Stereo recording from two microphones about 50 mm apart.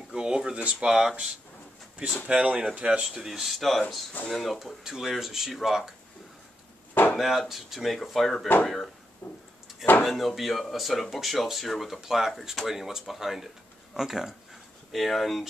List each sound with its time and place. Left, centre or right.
0.1 s speech: centre
2.2 s speech: right
3.3 s speech: centre
7.2 s speech: centre
9.2 s a sound: left
10.0 s speech: centre